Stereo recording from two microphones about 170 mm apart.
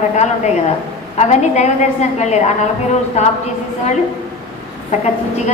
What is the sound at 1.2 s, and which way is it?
A woman's voice, 45° left (ahead or behind).